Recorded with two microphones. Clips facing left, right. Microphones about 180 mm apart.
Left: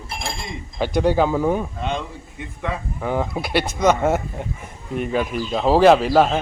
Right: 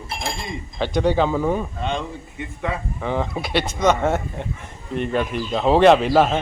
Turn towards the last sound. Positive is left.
turn(degrees=0)  # may be behind; listen again after turning